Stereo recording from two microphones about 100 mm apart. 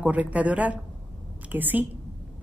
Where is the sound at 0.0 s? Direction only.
15° right (ahead or behind).